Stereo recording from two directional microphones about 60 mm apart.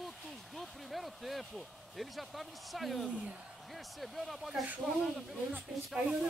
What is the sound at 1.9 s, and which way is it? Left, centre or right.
Speech, centre.